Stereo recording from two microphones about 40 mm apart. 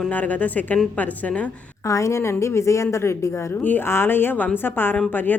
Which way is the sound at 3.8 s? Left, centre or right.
Left.